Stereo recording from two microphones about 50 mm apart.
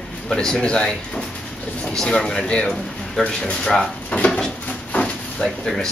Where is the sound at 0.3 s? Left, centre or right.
Centre.